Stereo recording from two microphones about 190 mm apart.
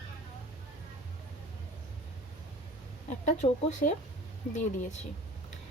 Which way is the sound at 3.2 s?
40° left (ahead or behind).